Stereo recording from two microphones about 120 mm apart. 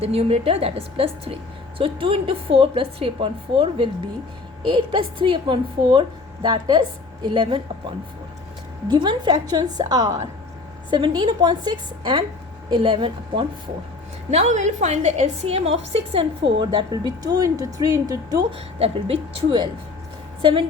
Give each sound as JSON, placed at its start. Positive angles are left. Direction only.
{"t": 0.0, "sound": "a woman's voice", "side_deg": -55}
{"t": 8.9, "sound": "a woman's voice", "side_deg": -40}
{"t": 14.3, "sound": "a woman's voice", "side_deg": -70}
{"t": 16.9, "sound": "speech", "side_deg": -30}
{"t": 18.5, "sound": "a woman's voice", "side_deg": -50}